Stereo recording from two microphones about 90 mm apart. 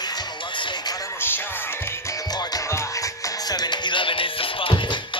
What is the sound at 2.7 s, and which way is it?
Music, 40° left (ahead or behind).